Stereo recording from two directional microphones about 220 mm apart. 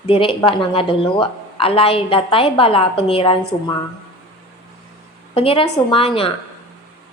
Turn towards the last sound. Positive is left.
turn(degrees=25)  # may be behind; listen again after turning